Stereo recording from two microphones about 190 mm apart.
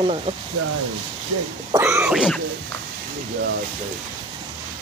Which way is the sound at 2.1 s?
Centre (ahead or behind).